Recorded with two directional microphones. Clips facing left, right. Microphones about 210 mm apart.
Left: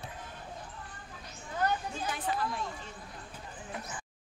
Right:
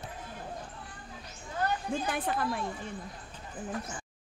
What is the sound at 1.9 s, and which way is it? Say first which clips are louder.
Speech: right 7 dB; 55° right (ahead or behind).